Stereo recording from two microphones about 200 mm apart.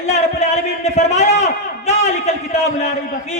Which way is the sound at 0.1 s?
35° left (ahead or behind).